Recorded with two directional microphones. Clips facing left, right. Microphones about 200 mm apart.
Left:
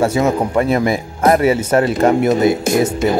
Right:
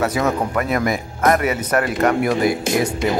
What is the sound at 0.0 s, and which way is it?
Speech, 25° left (ahead or behind).